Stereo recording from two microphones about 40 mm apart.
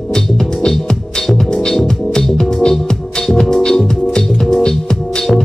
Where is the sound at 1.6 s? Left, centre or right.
Centre.